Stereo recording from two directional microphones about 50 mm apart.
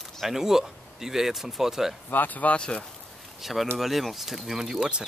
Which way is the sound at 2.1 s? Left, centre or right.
Left.